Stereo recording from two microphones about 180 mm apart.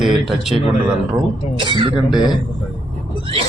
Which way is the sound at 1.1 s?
25° right (ahead or behind).